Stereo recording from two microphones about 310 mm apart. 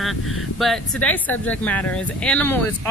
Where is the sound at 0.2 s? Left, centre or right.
Left.